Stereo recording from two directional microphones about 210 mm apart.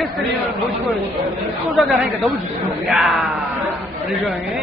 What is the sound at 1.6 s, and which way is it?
Speech, centre (ahead or behind).